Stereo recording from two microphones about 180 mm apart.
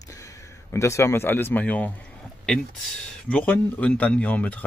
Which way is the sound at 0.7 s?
15° left (ahead or behind).